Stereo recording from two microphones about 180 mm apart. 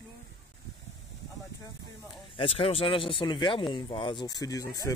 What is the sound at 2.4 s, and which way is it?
Speech, 30° left (ahead or behind).